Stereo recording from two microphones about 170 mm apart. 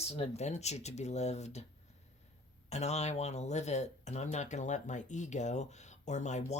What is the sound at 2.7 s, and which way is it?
Speech, 40° left (ahead or behind).